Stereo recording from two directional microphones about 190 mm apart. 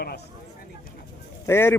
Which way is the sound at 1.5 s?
10° left (ahead or behind).